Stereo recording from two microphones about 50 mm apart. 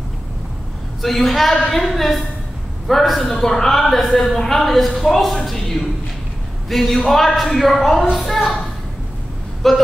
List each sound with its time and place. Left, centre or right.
1.0 s a man's voice: centre
9.6 s a man's voice: centre